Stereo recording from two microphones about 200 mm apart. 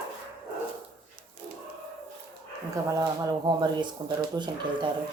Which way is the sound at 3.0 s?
20° right (ahead or behind).